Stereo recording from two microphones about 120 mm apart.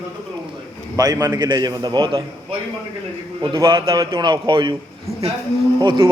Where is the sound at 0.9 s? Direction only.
30° right (ahead or behind); by 2.6 s 45° right (ahead or behind).